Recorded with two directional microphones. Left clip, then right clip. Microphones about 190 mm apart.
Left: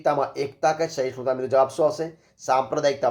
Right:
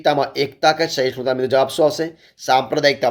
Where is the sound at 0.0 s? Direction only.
25° right (ahead or behind).